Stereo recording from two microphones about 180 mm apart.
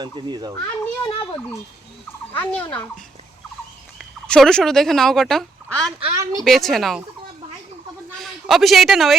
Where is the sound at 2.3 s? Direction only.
10° left (ahead or behind).